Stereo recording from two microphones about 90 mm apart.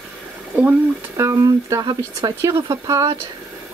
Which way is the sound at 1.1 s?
35° right (ahead or behind).